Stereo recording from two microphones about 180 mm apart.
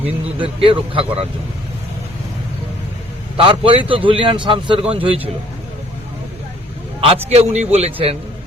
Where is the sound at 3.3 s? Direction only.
30° right (ahead or behind).